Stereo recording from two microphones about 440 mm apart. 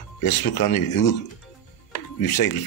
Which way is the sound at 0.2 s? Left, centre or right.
Left.